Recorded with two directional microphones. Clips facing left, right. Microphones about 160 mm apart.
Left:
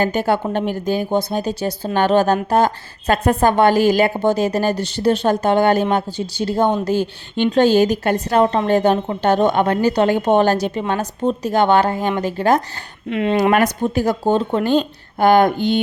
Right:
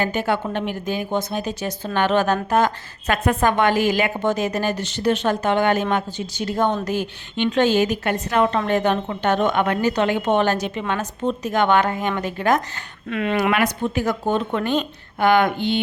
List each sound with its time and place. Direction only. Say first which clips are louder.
0.0 s speech: left 4 dB; 40° left (ahead or behind)
13.5 s speech: left 4 dB; 40° left (ahead or behind)